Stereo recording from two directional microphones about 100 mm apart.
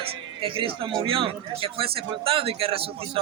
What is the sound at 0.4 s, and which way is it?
A man's voice, 60° right (ahead or behind).